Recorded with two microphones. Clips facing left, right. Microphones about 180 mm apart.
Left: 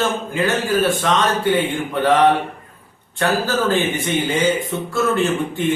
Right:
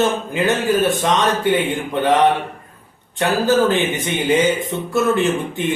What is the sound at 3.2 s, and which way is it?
Speech, 20° right (ahead or behind).